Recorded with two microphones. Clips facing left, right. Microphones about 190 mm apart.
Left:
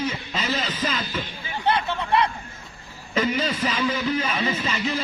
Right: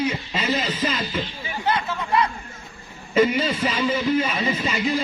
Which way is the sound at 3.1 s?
10° right (ahead or behind).